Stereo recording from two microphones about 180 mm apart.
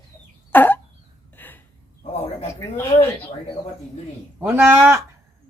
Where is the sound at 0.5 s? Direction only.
10° left (ahead or behind).